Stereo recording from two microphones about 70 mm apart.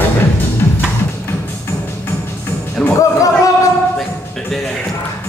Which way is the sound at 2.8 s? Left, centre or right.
Centre.